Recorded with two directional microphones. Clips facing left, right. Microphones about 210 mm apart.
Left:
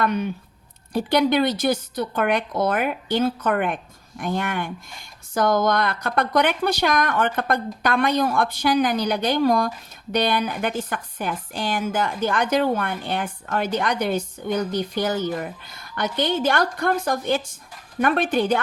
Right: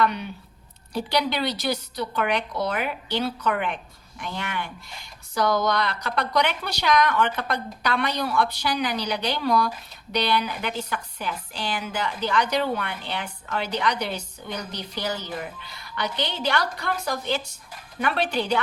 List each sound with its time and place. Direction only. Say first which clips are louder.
0.0 s a woman's voice: left 2 dB; 45° left (ahead or behind)